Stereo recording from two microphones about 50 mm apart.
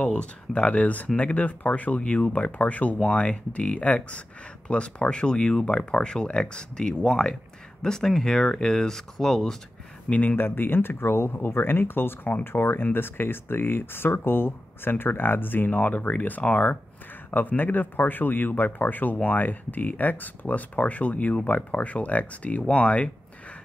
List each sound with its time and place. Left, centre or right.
0.0 s speech: left
10.0 s speech: left
10.3 s speech: left